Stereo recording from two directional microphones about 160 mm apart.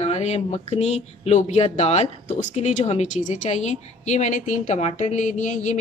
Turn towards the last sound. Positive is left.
turn(degrees=50)  # may be behind; listen again after turning